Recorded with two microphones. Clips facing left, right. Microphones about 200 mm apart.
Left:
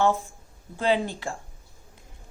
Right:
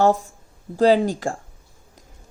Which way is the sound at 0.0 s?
40° right (ahead or behind).